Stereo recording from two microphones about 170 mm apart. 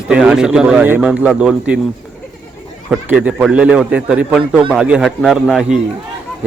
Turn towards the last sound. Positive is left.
turn(degrees=-5)  # may be behind; listen again after turning